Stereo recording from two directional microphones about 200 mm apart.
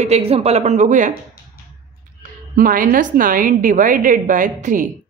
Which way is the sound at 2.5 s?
45° right (ahead or behind).